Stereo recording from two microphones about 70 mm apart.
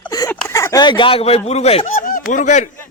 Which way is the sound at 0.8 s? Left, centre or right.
Left.